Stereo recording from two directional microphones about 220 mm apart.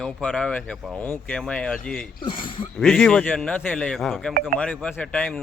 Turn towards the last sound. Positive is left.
turn(degrees=5)  # may be behind; listen again after turning